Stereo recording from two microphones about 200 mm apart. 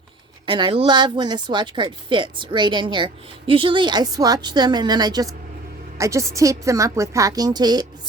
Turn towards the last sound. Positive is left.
turn(degrees=-20)  # may be behind; listen again after turning